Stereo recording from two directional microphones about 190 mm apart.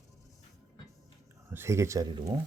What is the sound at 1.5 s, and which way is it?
Speech, 15° right (ahead or behind).